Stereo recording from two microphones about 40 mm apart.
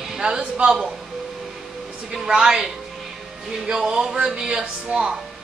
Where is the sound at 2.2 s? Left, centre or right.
Centre.